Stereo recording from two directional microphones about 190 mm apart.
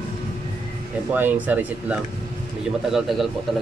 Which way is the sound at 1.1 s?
10° right (ahead or behind).